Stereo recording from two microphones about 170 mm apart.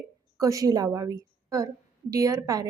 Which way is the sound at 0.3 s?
20° right (ahead or behind).